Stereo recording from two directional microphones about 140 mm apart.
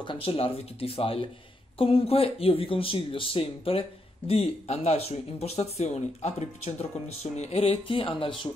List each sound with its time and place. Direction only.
0.0 s speech: 40° left (ahead or behind)